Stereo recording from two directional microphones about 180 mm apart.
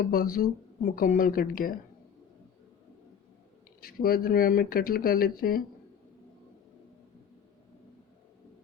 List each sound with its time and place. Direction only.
0.0 s speech: 55° left (ahead or behind)
3.8 s speech: 55° left (ahead or behind)